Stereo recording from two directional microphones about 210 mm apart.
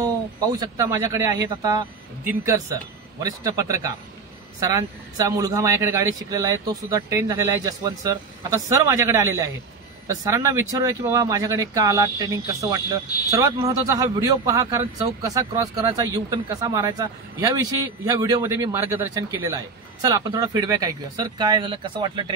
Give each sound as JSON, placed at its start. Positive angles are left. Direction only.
{"t": 0.0, "sound": "speech", "side_deg": -15}